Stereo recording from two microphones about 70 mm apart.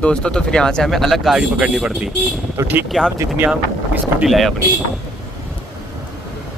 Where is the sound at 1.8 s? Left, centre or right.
Centre.